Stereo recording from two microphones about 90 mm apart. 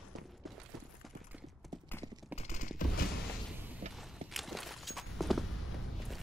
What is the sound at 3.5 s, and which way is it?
Music, 20° right (ahead or behind).